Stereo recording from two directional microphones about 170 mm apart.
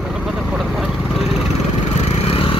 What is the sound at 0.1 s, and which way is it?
Vehicle, centre (ahead or behind).